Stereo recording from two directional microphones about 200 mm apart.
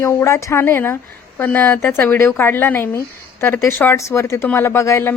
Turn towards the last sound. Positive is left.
turn(degrees=15)  # may be behind; listen again after turning